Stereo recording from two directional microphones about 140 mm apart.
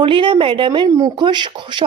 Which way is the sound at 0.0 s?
35° right (ahead or behind).